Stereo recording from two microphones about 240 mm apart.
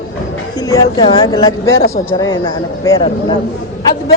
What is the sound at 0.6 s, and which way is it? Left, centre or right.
Speech, centre.